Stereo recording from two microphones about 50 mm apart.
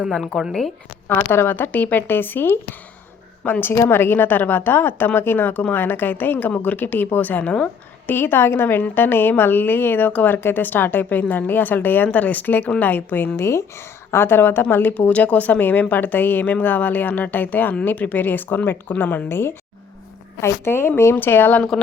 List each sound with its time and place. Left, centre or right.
0.3 s speech: centre
1.0 s a woman's voice: left
8.0 s a woman's voice: left
19.3 s a woman's voice: left
21.7 s speech: centre